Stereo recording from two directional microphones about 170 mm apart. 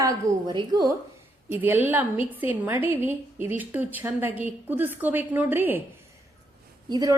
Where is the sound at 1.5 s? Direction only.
10° right (ahead or behind).